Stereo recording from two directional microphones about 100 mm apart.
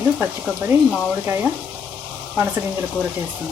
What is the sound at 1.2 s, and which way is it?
Speech, 20° right (ahead or behind).